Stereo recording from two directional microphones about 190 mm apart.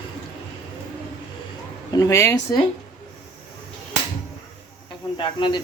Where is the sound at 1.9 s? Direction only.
15° left (ahead or behind).